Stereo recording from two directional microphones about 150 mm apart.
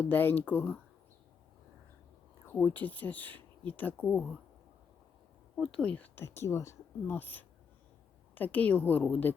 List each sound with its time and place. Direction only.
0.0 s speech: 15° left (ahead or behind)
2.5 s speech: 10° left (ahead or behind)
5.5 s speech: 5° left (ahead or behind)